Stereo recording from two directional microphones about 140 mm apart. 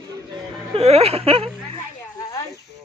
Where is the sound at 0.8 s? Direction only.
45° right (ahead or behind).